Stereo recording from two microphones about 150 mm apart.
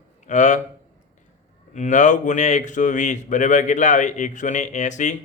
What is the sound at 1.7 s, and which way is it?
A man's voice, 55° left (ahead or behind).